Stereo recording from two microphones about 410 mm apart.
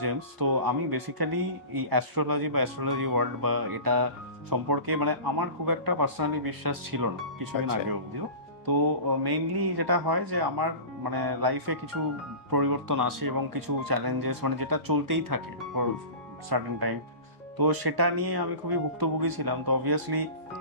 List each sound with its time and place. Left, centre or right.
0.0 s speech: right
9.2 s speech: right
16.4 s speech: right